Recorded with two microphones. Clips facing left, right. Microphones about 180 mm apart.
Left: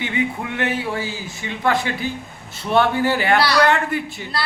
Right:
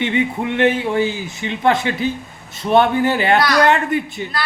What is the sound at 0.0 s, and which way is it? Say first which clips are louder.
Speech: right 4 dB; 25° right (ahead or behind).